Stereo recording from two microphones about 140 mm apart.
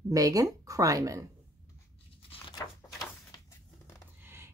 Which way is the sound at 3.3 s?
20° left (ahead or behind).